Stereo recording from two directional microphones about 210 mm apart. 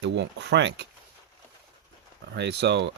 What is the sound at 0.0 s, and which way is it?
Speech, 55° right (ahead or behind).